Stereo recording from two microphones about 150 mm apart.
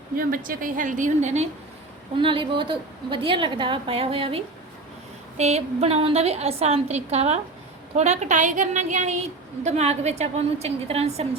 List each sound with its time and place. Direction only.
0.2 s a woman's voice: 65° right (ahead or behind); by 1.5 s 50° right (ahead or behind)
2.1 s a woman's voice: 35° right (ahead or behind)